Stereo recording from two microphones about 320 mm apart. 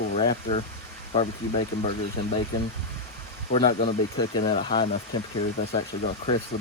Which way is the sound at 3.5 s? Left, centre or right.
Centre.